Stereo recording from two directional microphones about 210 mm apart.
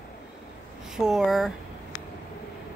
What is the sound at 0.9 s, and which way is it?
Speech, centre (ahead or behind).